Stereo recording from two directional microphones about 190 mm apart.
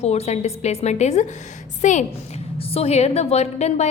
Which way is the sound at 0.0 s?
35° left (ahead or behind).